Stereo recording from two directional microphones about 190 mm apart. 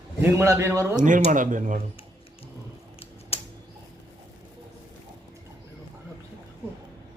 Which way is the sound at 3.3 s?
30° left (ahead or behind).